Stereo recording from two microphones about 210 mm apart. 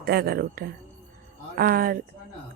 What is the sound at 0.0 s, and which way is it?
Speech, 45° right (ahead or behind).